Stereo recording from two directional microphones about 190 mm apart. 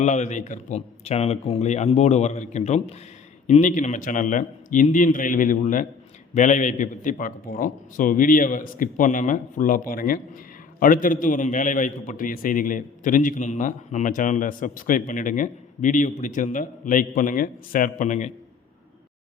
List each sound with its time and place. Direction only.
0.0 s a man's voice: 40° left (ahead or behind)